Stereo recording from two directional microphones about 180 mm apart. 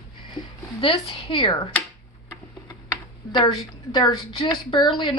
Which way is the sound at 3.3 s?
25° left (ahead or behind).